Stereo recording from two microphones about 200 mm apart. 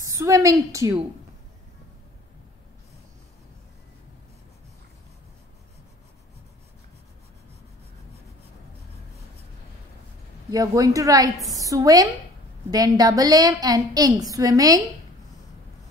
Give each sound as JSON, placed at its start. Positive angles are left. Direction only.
{"t": 0.0, "sound": "a woman's voice", "side_deg": -15}
{"t": 10.5, "sound": "a woman's voice", "side_deg": -20}